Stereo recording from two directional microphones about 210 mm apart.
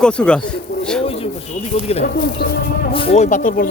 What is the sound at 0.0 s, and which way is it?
Pigeon, 5° left (ahead or behind).